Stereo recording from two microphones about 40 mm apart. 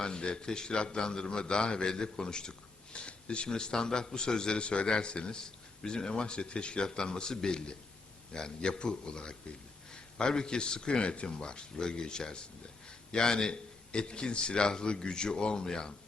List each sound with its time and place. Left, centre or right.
0.0 s a man's voice: left